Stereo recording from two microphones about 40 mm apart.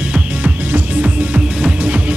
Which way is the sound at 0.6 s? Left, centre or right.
Right.